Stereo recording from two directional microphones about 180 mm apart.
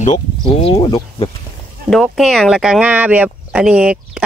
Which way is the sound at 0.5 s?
30° left (ahead or behind).